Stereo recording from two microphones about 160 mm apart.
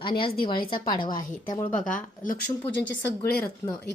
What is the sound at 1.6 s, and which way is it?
Speech, 5° left (ahead or behind).